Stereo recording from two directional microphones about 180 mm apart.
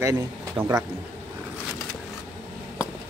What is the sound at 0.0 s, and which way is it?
Speech, 20° right (ahead or behind).